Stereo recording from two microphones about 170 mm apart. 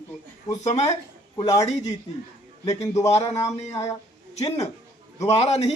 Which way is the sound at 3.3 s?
20° left (ahead or behind).